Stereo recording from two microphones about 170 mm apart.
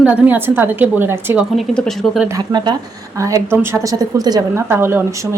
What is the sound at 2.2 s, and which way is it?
A woman's voice, 25° right (ahead or behind).